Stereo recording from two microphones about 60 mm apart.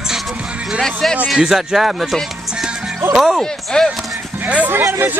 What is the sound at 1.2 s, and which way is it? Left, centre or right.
Speech, centre.